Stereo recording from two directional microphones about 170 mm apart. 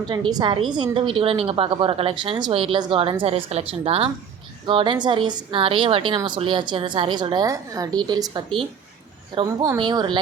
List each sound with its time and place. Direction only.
0.1 s a woman's voice: 25° right (ahead or behind)